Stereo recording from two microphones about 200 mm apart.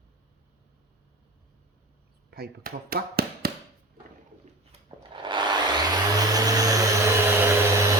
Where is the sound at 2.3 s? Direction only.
50° right (ahead or behind).